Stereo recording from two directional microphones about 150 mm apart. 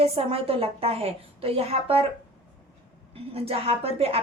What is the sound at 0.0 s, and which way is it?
Speech, 40° right (ahead or behind).